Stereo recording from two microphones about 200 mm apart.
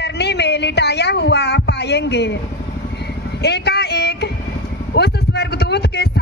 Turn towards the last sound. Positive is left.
turn(degrees=55)  # may be behind; listen again after turning